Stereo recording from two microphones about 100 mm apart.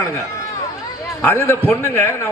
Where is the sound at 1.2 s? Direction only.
20° left (ahead or behind).